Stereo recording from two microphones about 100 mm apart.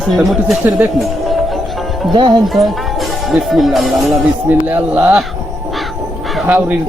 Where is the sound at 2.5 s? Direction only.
Centre (ahead or behind).